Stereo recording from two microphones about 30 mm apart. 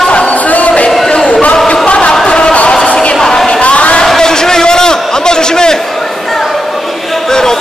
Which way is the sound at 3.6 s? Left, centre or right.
Left.